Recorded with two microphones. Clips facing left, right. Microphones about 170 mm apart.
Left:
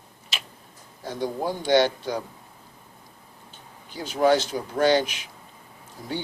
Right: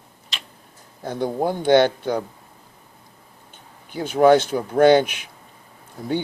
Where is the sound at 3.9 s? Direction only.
55° right (ahead or behind).